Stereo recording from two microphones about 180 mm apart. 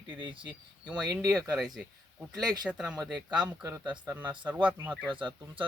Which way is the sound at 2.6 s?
5° right (ahead or behind).